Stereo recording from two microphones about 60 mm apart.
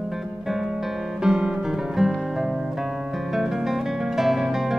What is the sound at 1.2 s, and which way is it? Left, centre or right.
Guitar, centre.